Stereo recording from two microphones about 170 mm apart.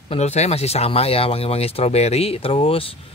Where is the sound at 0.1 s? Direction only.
40° left (ahead or behind).